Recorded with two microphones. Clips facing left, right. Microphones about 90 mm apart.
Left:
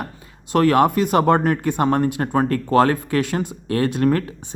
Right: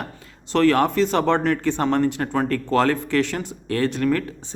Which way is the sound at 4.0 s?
35° left (ahead or behind).